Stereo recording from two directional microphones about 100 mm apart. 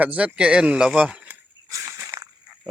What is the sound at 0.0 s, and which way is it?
Speech, 15° right (ahead or behind).